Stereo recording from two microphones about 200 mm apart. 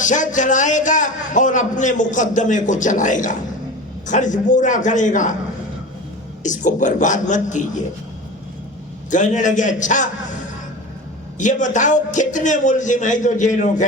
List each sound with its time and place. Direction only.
0.0 s a man's voice: 40° left (ahead or behind)
6.4 s a man's voice: 40° left (ahead or behind)
9.0 s a man's voice: 40° left (ahead or behind)
11.3 s a man's voice: 40° left (ahead or behind)